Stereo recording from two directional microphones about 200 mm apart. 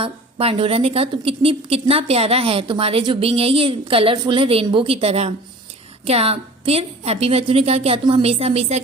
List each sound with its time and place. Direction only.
0.0 s a woman's voice: 30° right (ahead or behind)